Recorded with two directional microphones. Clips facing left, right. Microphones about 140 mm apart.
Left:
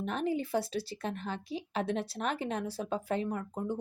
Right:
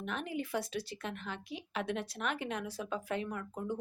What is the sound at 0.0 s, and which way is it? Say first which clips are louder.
Speech: left 6 dB; 35° left (ahead or behind).